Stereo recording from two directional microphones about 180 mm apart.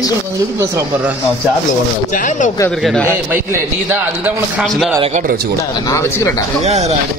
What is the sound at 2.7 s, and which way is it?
Speech, 5° left (ahead or behind).